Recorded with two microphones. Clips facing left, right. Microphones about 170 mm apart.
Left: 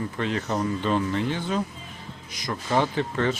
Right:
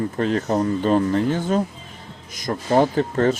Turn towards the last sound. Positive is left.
turn(degrees=-40)  # may be behind; listen again after turning